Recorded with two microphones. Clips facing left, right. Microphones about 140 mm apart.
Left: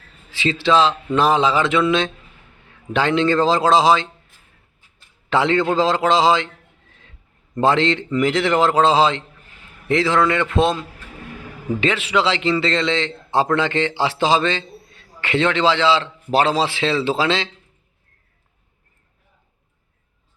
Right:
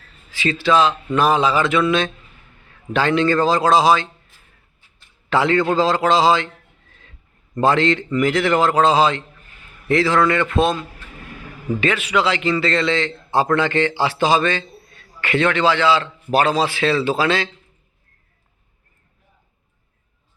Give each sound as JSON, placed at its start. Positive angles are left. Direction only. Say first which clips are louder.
{"t": 0.3, "sound": "a man's voice", "louder": "even", "side_deg": 25}
{"t": 5.3, "sound": "a man's voice", "louder": "even", "side_deg": 20}
{"t": 7.6, "sound": "a man's voice", "louder": "even", "side_deg": 20}